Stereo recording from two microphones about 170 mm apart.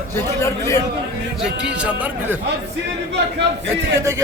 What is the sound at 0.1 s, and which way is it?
Speech, 15° left (ahead or behind).